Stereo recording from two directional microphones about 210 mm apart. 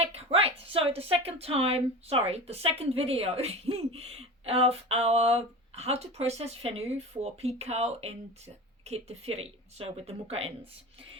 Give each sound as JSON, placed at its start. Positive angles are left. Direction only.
{"t": 0.0, "sound": "a woman's voice", "side_deg": -30}